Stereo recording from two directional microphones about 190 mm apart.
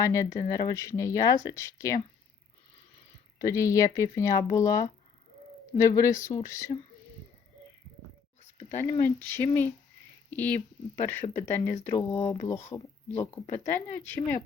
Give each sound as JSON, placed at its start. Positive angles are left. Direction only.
{"t": 0.0, "sound": "speech", "side_deg": 15}
{"t": 3.3, "sound": "speech", "side_deg": 15}
{"t": 8.4, "sound": "a sound", "side_deg": 35}
{"t": 8.8, "sound": "speech", "side_deg": 10}